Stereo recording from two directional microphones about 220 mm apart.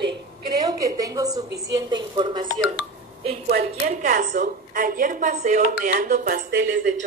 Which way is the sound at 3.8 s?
35° right (ahead or behind).